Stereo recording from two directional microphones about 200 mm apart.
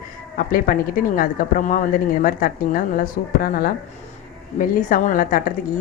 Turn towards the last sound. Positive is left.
turn(degrees=45)  # may be behind; listen again after turning